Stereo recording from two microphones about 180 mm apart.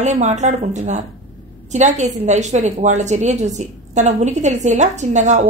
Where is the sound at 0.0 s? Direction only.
40° right (ahead or behind).